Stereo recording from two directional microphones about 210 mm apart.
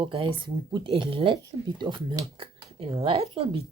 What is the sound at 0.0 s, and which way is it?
Speech, 25° right (ahead or behind).